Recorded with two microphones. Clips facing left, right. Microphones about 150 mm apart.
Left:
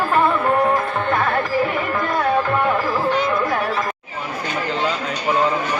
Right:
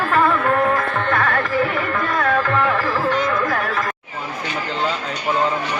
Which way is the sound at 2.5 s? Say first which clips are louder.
Even; 20° left (ahead or behind).